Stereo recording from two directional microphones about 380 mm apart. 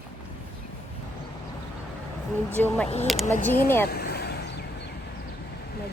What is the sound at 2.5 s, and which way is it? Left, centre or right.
Speech, centre.